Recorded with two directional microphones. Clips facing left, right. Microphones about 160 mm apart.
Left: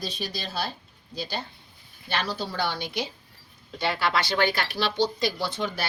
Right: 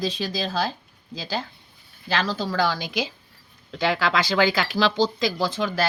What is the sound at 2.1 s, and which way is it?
Speech, 90° right.